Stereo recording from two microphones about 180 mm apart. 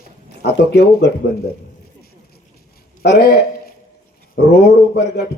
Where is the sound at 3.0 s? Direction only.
65° left (ahead or behind).